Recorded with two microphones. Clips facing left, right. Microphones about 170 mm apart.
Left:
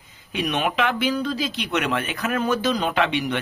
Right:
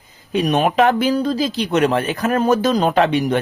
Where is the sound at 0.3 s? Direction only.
40° right (ahead or behind).